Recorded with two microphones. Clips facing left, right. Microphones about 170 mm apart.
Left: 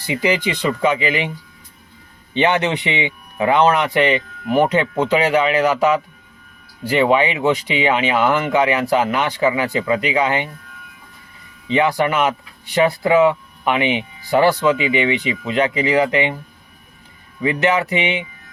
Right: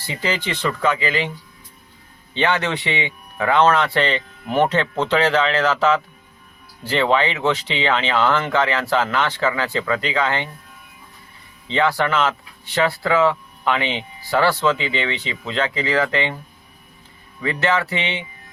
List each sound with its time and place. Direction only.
0.1 s speech: 15° left (ahead or behind)
2.3 s speech: 20° left (ahead or behind)
11.7 s speech: 15° left (ahead or behind)
17.4 s speech: 15° left (ahead or behind)